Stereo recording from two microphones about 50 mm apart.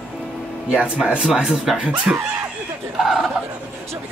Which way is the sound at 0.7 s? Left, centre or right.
Right.